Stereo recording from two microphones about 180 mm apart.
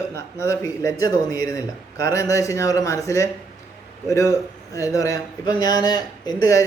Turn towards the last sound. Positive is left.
turn(degrees=20)  # may be behind; listen again after turning